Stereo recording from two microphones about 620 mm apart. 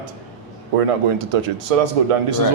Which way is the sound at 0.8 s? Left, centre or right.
Right.